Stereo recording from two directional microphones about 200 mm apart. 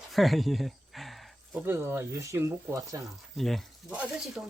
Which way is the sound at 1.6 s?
10° right (ahead or behind).